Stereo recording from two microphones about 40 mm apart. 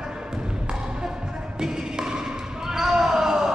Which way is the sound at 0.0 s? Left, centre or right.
Centre.